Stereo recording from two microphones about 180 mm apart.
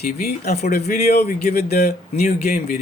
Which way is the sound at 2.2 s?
50° left (ahead or behind).